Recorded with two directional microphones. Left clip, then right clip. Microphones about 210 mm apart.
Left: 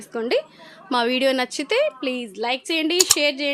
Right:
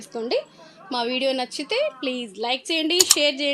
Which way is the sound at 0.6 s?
20° left (ahead or behind).